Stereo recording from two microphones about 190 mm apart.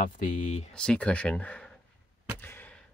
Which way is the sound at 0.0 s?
45° left (ahead or behind).